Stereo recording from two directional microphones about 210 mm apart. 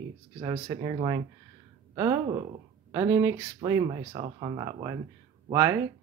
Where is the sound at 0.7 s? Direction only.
25° right (ahead or behind).